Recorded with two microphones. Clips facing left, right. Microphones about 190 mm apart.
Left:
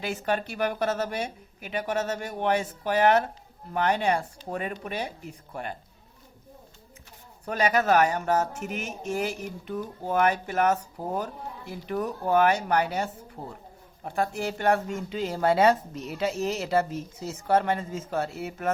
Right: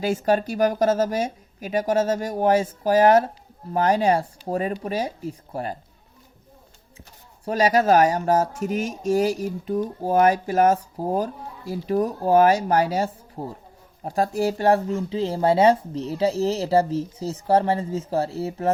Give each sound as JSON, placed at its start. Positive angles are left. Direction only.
{"t": 0.0, "sound": "speech", "side_deg": -40}
{"t": 7.4, "sound": "speech", "side_deg": -35}